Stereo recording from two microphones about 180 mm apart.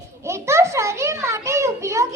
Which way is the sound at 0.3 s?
15° right (ahead or behind).